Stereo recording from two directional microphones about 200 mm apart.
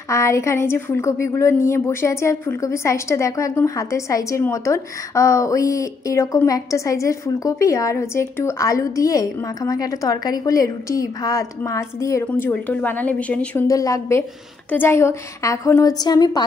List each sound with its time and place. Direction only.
0.1 s a woman's voice: 15° left (ahead or behind)